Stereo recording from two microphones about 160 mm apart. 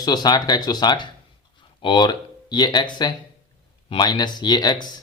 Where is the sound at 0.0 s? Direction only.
25° left (ahead or behind).